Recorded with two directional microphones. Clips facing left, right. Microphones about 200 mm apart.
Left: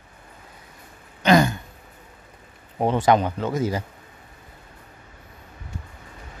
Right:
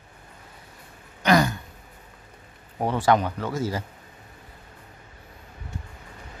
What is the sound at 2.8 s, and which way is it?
Speech, 20° left (ahead or behind).